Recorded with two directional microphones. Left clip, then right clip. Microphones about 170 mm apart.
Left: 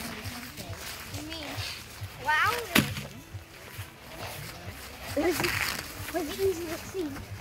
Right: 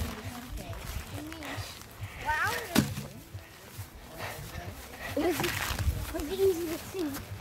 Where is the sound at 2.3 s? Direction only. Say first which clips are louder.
Left 5 dB; 35° right (ahead or behind).